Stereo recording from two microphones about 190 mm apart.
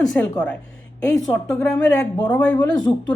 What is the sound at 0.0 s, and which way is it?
A woman's voice, 5° left (ahead or behind).